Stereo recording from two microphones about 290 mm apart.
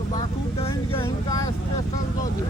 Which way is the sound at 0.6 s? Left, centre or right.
Centre.